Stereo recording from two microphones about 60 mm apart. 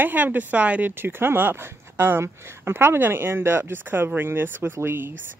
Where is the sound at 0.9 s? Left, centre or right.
Right.